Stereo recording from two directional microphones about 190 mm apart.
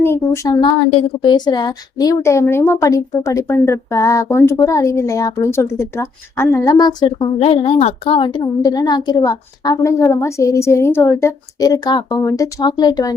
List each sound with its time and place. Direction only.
0.0 s a woman's voice: 15° left (ahead or behind)